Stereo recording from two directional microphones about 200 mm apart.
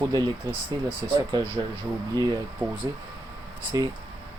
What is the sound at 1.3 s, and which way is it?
Speech, 20° right (ahead or behind).